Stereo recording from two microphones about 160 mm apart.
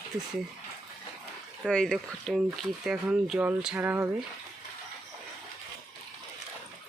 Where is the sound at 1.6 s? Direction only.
5° left (ahead or behind); by 4.1 s 15° right (ahead or behind).